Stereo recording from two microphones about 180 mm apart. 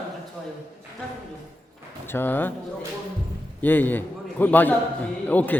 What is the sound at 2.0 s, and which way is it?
Speech, 10° left (ahead or behind).